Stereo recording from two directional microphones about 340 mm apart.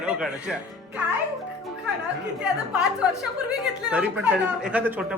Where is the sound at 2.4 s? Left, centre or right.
Centre.